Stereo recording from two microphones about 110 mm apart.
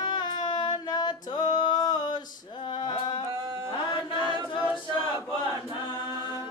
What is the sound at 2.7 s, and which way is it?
Music, 45° left (ahead or behind).